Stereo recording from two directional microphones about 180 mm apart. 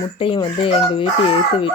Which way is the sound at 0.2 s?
30° left (ahead or behind).